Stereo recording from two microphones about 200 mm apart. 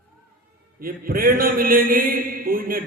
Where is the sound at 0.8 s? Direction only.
45° right (ahead or behind).